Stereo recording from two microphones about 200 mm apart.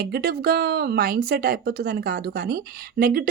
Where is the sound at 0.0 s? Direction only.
50° right (ahead or behind).